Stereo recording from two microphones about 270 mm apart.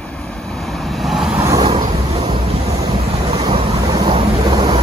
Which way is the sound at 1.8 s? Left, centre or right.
Right.